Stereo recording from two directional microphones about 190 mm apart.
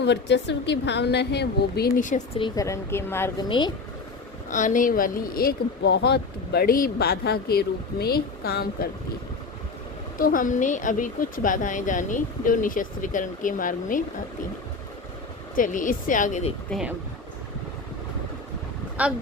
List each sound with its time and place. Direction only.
0.0 s a woman's voice: 65° left (ahead or behind); by 2.2 s 40° left (ahead or behind)
2.4 s speech: 15° left (ahead or behind)
4.4 s speech: 40° left (ahead or behind)
10.2 s speech: 45° left (ahead or behind)
15.5 s speech: 45° left (ahead or behind)
16.6 s speech: centre (ahead or behind)
19.0 s speech: 5° right (ahead or behind)